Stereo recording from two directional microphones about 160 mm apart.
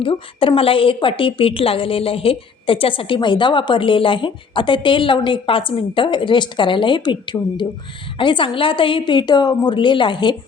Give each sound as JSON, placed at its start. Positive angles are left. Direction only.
{"t": 0.0, "sound": "a woman's voice", "side_deg": 35}